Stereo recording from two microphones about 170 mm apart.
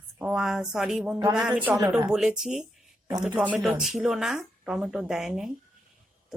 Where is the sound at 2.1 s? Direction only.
5° right (ahead or behind).